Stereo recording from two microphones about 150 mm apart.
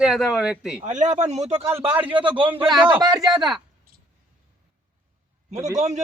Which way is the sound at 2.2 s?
35° right (ahead or behind).